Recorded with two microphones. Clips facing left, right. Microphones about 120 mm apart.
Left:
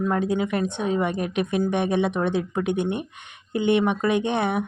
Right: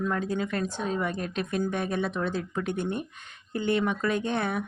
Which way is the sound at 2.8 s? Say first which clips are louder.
Left 5 dB; 70° left (ahead or behind).